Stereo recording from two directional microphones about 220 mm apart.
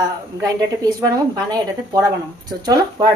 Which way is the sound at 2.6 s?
20° right (ahead or behind).